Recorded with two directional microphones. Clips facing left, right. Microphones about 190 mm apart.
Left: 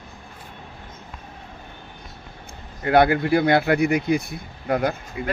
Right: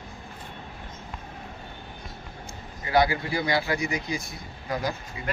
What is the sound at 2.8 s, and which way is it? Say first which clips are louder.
Speech: left 6 dB; 60° left (ahead or behind).